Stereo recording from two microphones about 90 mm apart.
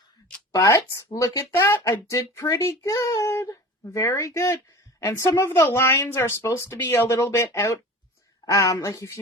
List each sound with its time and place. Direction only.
0.5 s speech: 35° left (ahead or behind)